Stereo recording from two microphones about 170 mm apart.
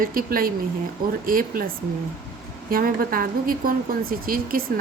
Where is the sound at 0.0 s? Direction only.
55° right (ahead or behind).